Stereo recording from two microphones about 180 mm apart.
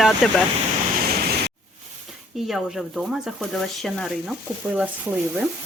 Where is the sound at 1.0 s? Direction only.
60° right (ahead or behind).